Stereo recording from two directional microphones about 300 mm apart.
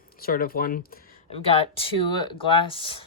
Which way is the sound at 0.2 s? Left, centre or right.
Left.